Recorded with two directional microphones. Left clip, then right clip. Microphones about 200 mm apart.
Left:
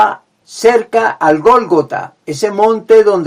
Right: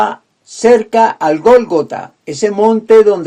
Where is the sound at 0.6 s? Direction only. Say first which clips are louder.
Right 1 dB; 35° right (ahead or behind).